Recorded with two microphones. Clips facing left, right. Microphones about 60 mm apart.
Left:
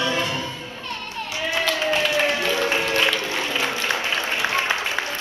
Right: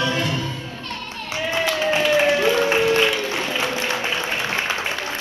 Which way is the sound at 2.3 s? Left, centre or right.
Right.